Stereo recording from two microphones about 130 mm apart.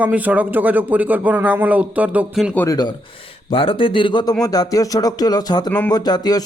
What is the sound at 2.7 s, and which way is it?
Speech, 30° left (ahead or behind).